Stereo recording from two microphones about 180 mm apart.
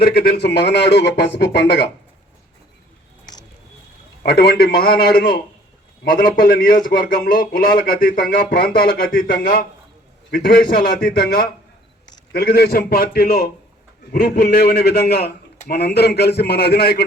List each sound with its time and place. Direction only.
0.0 s speech: 60° left (ahead or behind); by 1.8 s 75° left (ahead or behind)
4.2 s a man's voice: 60° left (ahead or behind)